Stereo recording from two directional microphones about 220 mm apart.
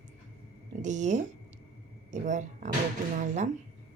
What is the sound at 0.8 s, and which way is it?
Speech, 35° right (ahead or behind).